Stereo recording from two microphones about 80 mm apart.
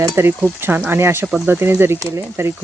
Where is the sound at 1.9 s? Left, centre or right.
Right.